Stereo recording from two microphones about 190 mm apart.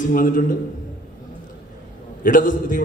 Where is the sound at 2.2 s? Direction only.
45° left (ahead or behind).